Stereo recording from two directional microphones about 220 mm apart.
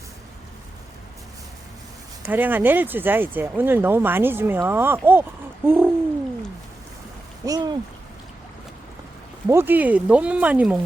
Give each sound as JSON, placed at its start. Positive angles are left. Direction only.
{"t": 2.2, "sound": "speech", "side_deg": -10}
{"t": 7.4, "sound": "speech", "side_deg": -20}
{"t": 9.5, "sound": "speech", "side_deg": -10}